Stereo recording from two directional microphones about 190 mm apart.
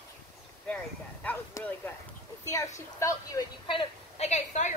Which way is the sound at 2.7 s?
15° left (ahead or behind).